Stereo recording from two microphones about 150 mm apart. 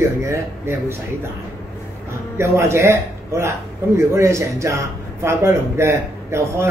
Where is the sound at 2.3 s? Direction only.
15° right (ahead or behind).